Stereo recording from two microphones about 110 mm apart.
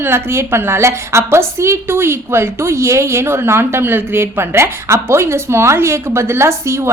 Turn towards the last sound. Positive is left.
turn(degrees=-25)  # may be behind; listen again after turning